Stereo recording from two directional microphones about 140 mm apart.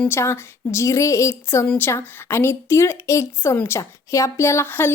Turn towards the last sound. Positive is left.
turn(degrees=15)  # may be behind; listen again after turning